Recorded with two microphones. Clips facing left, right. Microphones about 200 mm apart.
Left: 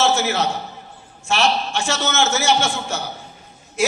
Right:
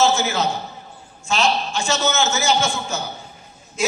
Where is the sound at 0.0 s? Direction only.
70° left (ahead or behind).